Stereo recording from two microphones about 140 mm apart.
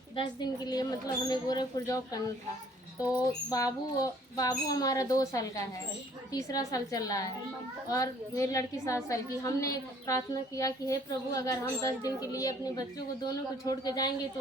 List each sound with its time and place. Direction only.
0.2 s a woman's voice: 30° left (ahead or behind)
3.5 s a woman's voice: 25° left (ahead or behind)